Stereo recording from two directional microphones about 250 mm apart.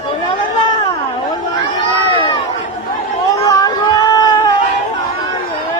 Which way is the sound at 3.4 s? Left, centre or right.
Centre.